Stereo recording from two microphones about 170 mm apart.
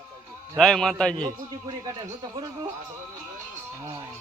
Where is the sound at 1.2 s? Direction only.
20° right (ahead or behind).